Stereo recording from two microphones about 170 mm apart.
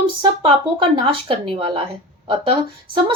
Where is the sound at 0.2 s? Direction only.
30° right (ahead or behind).